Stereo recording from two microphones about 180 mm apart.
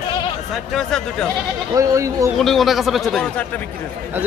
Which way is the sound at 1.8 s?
15° right (ahead or behind).